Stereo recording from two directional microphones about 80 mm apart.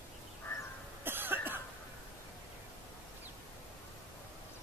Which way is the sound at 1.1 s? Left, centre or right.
Right.